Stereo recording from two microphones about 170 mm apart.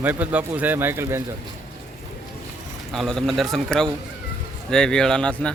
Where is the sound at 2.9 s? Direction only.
Centre (ahead or behind).